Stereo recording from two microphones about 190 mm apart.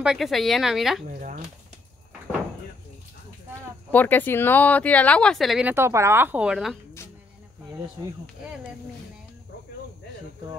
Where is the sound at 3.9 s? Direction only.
10° left (ahead or behind).